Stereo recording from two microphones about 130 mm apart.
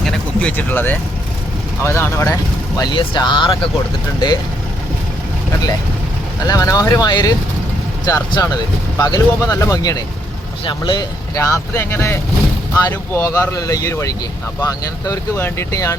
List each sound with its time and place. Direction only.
0.0 s a sound: centre (ahead or behind)
0.5 s speech: 15° left (ahead or behind); by 3.7 s 40° left (ahead or behind)
6.5 s speech: 25° left (ahead or behind)